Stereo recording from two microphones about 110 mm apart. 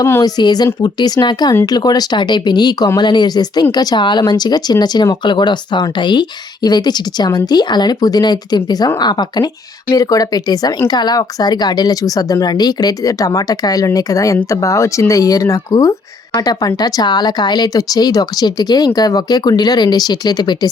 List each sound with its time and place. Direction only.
0.0 s speech: 25° left (ahead or behind)
0.3 s speech: 40° left (ahead or behind)